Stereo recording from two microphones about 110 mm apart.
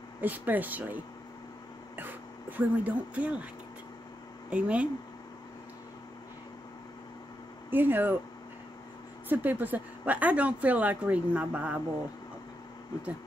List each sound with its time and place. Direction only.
0.2 s speech: 15° right (ahead or behind)
2.0 s a sound: 15° right (ahead or behind)
4.5 s speech: 10° right (ahead or behind)
7.7 s speech: 20° right (ahead or behind)
9.3 s speech: 15° right (ahead or behind)